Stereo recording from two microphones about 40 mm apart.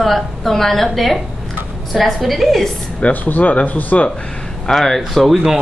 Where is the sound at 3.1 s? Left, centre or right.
Left.